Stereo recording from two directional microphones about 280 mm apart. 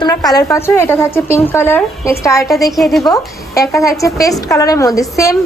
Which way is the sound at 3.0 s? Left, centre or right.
Centre.